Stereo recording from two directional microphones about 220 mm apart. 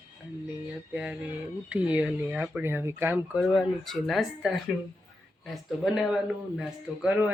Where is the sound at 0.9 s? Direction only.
5° right (ahead or behind).